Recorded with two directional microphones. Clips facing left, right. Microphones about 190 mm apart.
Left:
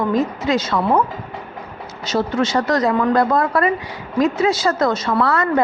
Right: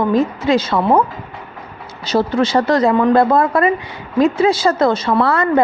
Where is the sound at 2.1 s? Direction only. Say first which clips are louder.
Right 3 dB; 35° right (ahead or behind).